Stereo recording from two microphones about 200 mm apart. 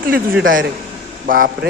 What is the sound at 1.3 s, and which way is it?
Speech, 45° right (ahead or behind).